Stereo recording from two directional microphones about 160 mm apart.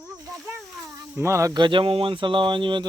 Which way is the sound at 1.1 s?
15° right (ahead or behind).